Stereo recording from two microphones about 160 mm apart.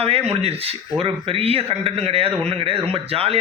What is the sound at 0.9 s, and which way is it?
Speech, 35° right (ahead or behind).